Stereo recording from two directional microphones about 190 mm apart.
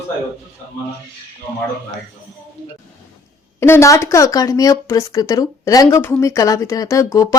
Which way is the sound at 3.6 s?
15° left (ahead or behind).